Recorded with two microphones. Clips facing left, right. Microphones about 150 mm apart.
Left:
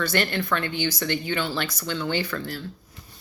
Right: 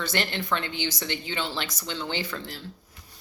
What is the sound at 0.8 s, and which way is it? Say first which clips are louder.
Speech: left 4 dB; 55° left (ahead or behind).